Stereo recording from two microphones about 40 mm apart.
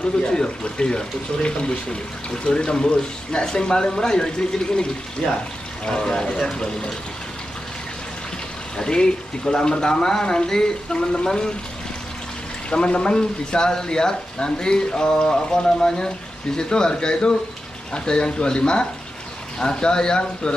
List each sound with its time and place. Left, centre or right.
0.3 s speech: centre
8.7 s speech: centre
12.6 s speech: left